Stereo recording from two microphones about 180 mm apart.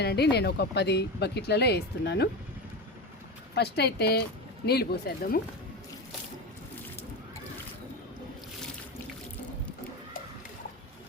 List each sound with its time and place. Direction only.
0.0 s speech: 65° left (ahead or behind)
3.5 s speech: 65° left (ahead or behind)